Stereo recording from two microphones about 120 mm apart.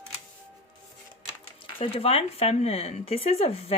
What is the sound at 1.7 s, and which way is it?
Speech, 50° left (ahead or behind).